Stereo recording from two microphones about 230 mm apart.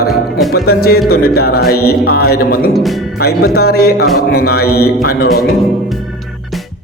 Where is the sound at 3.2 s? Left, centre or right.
Left.